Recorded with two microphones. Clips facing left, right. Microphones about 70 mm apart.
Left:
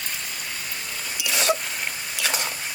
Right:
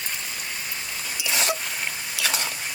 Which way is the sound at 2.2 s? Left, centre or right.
Centre.